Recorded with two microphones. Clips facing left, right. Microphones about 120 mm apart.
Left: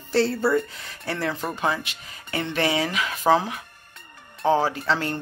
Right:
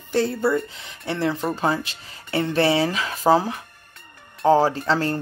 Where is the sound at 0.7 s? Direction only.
20° right (ahead or behind).